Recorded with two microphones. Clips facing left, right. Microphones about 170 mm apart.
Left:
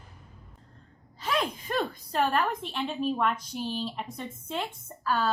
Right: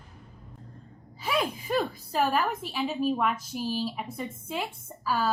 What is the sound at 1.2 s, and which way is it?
A woman's voice, 10° right (ahead or behind).